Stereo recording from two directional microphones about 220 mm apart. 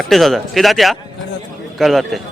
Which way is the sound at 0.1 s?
Centre (ahead or behind).